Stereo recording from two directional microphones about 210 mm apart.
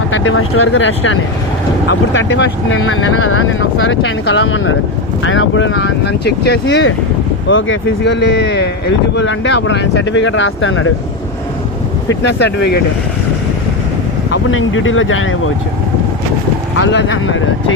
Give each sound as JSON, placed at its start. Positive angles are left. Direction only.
{"t": 0.1, "sound": "speech", "side_deg": 75}
{"t": 2.8, "sound": "speech", "side_deg": 70}
{"t": 12.2, "sound": "speech", "side_deg": 55}
{"t": 14.3, "sound": "speech", "side_deg": 65}
{"t": 16.8, "sound": "speech", "side_deg": 60}